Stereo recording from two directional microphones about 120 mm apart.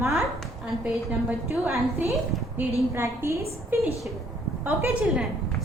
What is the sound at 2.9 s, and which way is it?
Speech, 20° right (ahead or behind).